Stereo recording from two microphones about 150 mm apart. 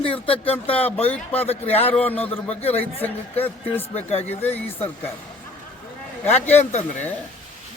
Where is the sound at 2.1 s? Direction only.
10° left (ahead or behind).